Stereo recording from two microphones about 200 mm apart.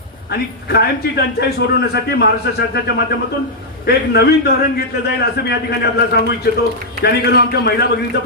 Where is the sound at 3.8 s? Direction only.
55° left (ahead or behind).